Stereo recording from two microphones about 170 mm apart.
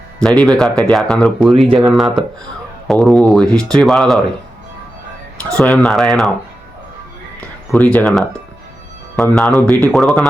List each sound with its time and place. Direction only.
0.2 s speech: 5° left (ahead or behind)
1.6 s speech: 30° right (ahead or behind)
1.9 s speech: centre (ahead or behind)
5.5 s speech: 5° left (ahead or behind)
7.7 s speech: 10° left (ahead or behind)
9.3 s speech: centre (ahead or behind)